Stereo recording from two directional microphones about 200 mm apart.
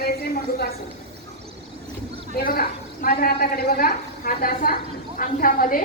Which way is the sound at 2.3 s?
50° left (ahead or behind).